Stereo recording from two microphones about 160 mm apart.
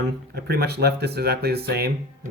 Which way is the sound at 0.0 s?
85° right.